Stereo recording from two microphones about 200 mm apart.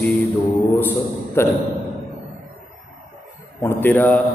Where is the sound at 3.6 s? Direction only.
10° left (ahead or behind).